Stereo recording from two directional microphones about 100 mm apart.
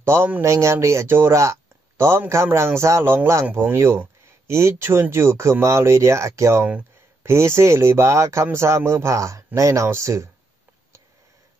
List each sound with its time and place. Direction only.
0.0 s a man's voice: 25° right (ahead or behind)